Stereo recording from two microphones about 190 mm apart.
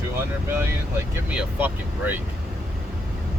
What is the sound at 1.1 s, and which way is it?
Speech, 5° right (ahead or behind).